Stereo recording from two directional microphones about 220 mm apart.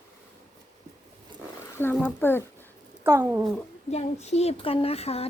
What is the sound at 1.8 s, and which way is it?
Speech, 10° left (ahead or behind).